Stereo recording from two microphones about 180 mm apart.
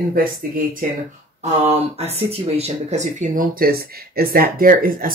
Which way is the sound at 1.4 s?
35° right (ahead or behind).